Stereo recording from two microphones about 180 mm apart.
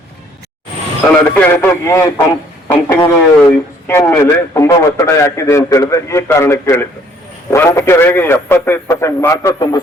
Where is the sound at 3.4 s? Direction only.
10° left (ahead or behind).